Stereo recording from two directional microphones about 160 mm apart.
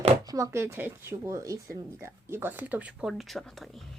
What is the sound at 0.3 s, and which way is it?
Speech, 20° right (ahead or behind).